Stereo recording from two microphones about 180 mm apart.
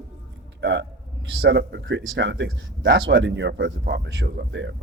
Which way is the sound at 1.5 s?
75° right (ahead or behind).